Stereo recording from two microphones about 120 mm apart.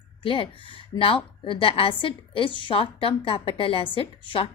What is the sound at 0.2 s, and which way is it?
A woman's voice, 45° left (ahead or behind).